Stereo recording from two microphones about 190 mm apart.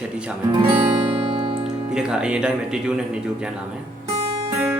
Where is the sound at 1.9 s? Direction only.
5° right (ahead or behind).